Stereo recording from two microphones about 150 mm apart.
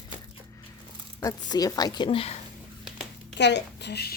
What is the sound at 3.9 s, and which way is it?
Speech, 90° left.